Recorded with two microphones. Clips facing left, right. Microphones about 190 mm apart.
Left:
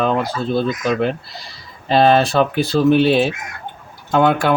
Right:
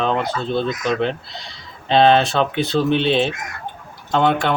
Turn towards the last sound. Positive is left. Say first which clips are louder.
# left 2 dB
turn(degrees=5)  # may be behind; listen again after turning